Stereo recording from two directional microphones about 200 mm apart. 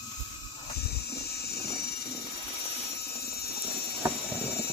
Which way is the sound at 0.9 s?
55° left (ahead or behind).